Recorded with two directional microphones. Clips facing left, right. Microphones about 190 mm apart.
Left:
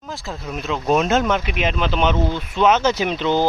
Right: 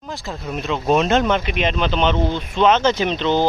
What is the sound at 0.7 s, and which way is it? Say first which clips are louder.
Speech: right 1 dB; centre (ahead or behind).